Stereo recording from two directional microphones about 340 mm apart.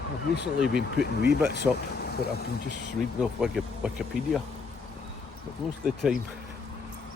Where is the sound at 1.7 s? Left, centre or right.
Centre.